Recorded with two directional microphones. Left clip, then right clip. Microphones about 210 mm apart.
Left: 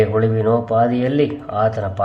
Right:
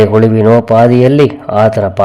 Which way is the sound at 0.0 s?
40° right (ahead or behind).